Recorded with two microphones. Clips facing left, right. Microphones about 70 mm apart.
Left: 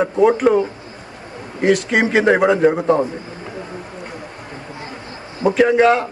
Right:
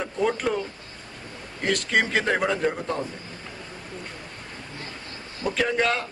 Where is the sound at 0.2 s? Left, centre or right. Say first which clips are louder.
Left 11 dB; left.